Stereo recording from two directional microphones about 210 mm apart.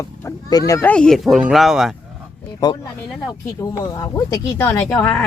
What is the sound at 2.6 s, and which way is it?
Speech, 20° left (ahead or behind).